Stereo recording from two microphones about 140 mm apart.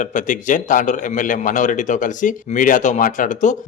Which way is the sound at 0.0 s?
65° left (ahead or behind).